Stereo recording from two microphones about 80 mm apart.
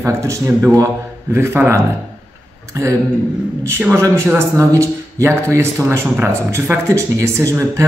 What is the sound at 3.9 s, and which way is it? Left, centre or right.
Speech, right.